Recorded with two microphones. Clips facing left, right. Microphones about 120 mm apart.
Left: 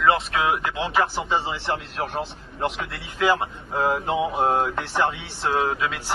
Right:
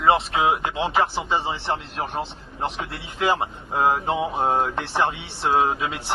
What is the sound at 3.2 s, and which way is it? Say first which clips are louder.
Speech: left 1 dB; 25° right (ahead or behind).